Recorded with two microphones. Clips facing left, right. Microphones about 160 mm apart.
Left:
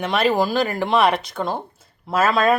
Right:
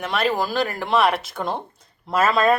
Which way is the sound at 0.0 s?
Centre (ahead or behind).